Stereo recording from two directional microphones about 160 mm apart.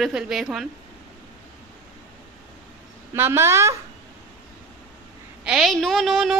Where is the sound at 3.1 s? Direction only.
15° right (ahead or behind).